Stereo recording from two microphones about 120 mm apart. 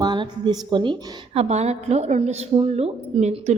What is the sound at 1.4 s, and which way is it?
Speech, 65° right (ahead or behind).